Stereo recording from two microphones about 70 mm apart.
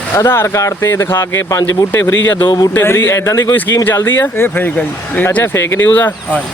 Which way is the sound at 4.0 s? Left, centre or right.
Left.